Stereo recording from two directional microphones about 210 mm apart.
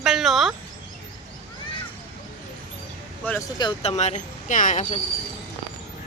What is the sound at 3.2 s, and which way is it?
Speech, 15° left (ahead or behind).